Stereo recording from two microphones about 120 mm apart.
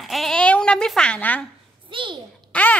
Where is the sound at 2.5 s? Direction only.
15° left (ahead or behind).